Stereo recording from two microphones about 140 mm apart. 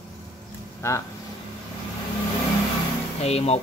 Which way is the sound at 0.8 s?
20° left (ahead or behind).